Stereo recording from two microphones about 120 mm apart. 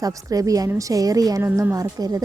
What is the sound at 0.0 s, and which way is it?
A woman's voice, 30° right (ahead or behind).